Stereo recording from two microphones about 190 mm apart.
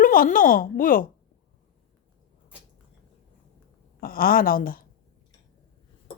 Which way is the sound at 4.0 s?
50° left (ahead or behind).